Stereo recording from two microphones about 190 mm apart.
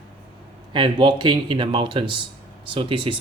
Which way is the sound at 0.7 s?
25° right (ahead or behind).